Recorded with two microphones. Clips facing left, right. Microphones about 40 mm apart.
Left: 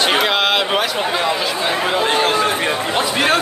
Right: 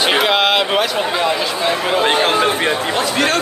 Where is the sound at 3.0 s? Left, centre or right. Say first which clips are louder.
Left 2 dB; centre.